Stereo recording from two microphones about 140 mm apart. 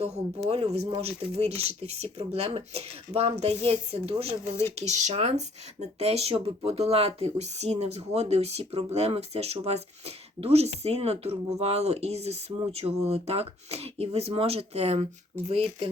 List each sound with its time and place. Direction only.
0.4 s speech: 45° right (ahead or behind)